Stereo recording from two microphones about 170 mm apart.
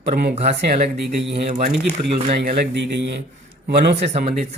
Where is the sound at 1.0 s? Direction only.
85° right.